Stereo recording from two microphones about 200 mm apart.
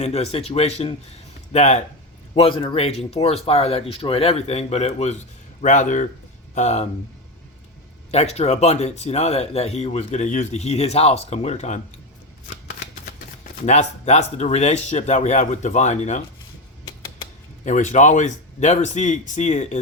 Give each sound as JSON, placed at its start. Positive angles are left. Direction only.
{"t": 0.0, "sound": "speech", "side_deg": 30}
{"t": 8.1, "sound": "speech", "side_deg": 35}
{"t": 13.7, "sound": "speech", "side_deg": 35}
{"t": 17.7, "sound": "speech", "side_deg": 35}